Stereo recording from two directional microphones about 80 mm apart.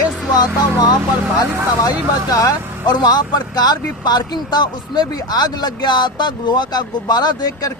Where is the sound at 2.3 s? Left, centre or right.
Left.